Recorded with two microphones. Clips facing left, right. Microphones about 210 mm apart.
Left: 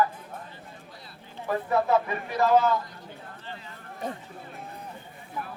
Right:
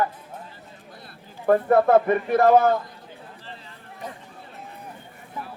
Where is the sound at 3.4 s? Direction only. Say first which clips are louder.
Left 1 dB; 30° right (ahead or behind).